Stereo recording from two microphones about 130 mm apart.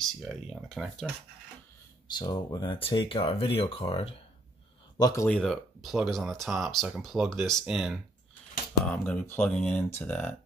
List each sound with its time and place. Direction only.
0.0 s speech: centre (ahead or behind)
2.0 s speech: 35° left (ahead or behind)
4.9 s speech: 25° left (ahead or behind)
5.3 s speech: 5° left (ahead or behind)
9.0 s speech: 15° left (ahead or behind)